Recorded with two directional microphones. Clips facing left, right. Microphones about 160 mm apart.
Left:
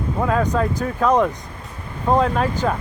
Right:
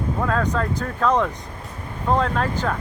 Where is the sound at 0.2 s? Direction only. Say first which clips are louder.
Left 4 dB; 10° left (ahead or behind).